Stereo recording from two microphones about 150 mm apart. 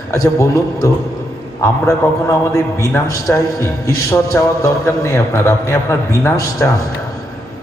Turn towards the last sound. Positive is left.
turn(degrees=20)  # may be behind; listen again after turning